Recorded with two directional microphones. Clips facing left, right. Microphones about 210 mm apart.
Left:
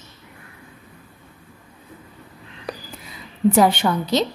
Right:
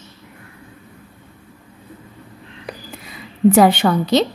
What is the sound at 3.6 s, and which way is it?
Speech, 70° right (ahead or behind).